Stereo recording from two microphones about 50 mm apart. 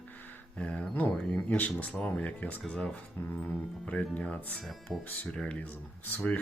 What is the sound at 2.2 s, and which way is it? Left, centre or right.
Speech, left.